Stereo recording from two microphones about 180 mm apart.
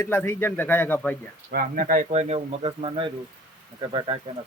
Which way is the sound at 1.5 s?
50° right (ahead or behind).